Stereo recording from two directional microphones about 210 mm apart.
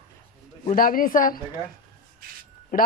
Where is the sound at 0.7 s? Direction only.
40° left (ahead or behind).